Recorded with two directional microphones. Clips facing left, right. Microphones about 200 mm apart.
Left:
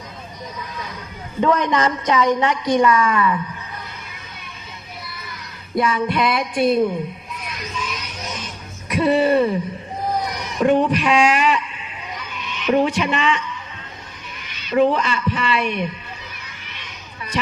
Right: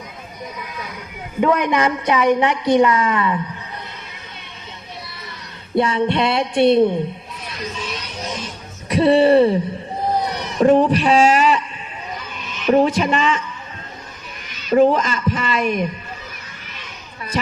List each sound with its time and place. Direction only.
1.4 s a woman's voice: 15° right (ahead or behind)
5.7 s speech: 30° right (ahead or behind)
7.4 s music: 35° right (ahead or behind)
8.9 s speech: 30° right (ahead or behind)
12.1 s a sound: 35° right (ahead or behind)
14.4 s a man's voice: 40° right (ahead or behind)
17.3 s speech: 40° right (ahead or behind)